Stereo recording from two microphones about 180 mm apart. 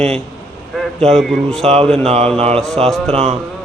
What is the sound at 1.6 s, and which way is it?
Speech, 35° right (ahead or behind).